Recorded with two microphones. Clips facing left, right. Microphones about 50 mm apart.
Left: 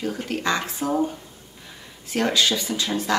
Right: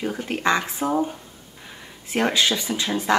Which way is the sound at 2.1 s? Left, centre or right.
Centre.